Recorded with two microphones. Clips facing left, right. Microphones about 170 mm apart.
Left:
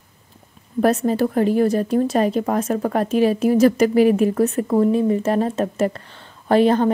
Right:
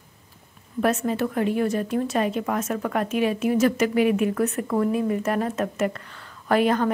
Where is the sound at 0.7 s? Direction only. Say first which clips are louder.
Left 5 dB; 35° left (ahead or behind).